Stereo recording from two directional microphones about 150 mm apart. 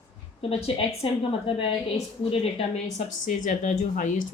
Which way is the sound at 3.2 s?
60° left (ahead or behind).